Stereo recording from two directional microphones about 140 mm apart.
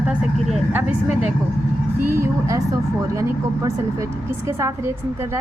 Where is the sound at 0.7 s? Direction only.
10° right (ahead or behind).